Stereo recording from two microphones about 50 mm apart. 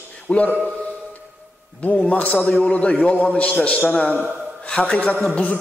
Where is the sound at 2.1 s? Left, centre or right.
Left.